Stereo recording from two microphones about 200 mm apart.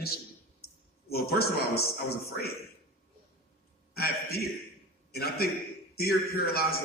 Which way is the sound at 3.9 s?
50° left (ahead or behind).